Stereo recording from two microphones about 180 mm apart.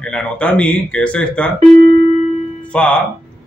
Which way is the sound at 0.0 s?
5° left (ahead or behind).